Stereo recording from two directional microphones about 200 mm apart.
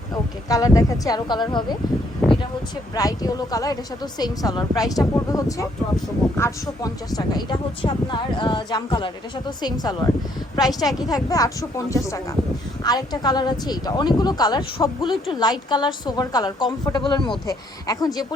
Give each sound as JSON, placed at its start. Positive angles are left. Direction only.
{"t": 0.1, "sound": "a woman's voice", "side_deg": 15}
{"t": 2.9, "sound": "a woman's voice", "side_deg": 20}